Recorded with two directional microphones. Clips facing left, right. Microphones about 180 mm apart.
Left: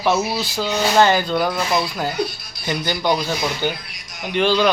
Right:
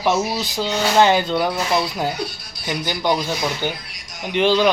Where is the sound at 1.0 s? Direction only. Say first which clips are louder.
Right 1 dB; 20° right (ahead or behind).